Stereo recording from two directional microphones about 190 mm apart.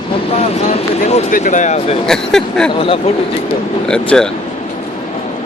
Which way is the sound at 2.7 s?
30° left (ahead or behind).